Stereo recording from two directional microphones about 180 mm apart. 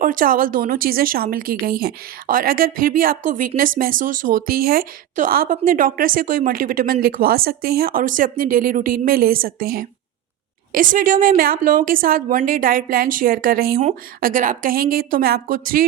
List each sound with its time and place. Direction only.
0.0 s speech: 50° right (ahead or behind)